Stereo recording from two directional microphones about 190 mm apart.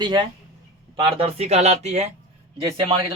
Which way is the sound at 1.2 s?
35° right (ahead or behind).